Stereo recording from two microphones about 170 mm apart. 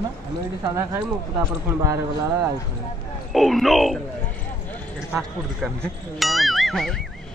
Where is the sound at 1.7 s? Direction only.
20° right (ahead or behind).